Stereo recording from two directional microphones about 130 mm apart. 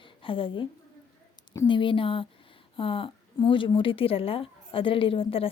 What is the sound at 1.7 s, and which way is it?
Speech, 40° left (ahead or behind).